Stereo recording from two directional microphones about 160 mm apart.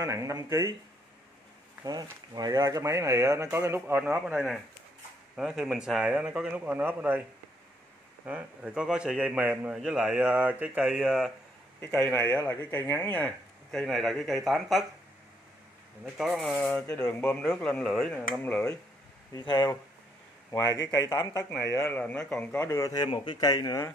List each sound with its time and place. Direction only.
0.0 s speech: 20° right (ahead or behind)
1.9 s speech: 25° right (ahead or behind)
8.3 s speech: 10° right (ahead or behind)
16.2 s a man's voice: centre (ahead or behind)
19.3 s speech: 25° left (ahead or behind)
21.5 s a man's voice: 5° left (ahead or behind); by 23.9 s 25° left (ahead or behind)